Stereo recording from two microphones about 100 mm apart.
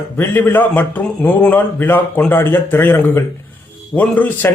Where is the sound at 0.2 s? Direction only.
20° left (ahead or behind).